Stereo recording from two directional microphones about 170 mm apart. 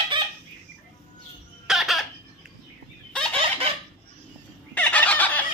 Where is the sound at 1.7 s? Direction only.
Centre (ahead or behind).